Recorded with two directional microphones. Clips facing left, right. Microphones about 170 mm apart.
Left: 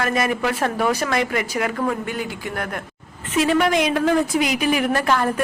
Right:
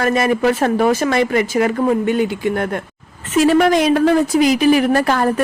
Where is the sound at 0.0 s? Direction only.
30° right (ahead or behind).